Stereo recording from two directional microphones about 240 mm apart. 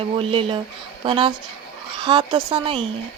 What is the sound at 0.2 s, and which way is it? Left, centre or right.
Speech, right.